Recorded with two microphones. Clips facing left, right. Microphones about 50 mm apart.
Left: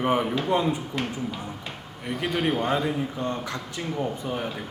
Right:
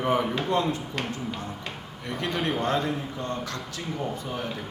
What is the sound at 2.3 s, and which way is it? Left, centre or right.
Speech, centre.